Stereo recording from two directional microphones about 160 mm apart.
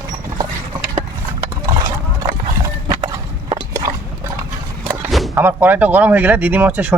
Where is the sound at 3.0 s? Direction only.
35° right (ahead or behind).